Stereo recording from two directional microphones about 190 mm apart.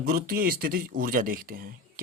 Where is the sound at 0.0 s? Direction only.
50° right (ahead or behind).